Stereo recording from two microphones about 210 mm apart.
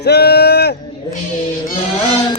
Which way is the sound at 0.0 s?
50° left (ahead or behind).